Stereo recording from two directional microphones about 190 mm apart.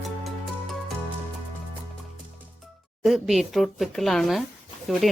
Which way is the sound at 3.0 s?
Centre (ahead or behind).